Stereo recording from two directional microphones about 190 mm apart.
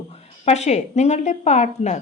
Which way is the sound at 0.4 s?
35° left (ahead or behind).